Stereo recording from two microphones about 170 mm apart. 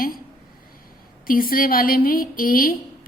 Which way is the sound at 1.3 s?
55° left (ahead or behind).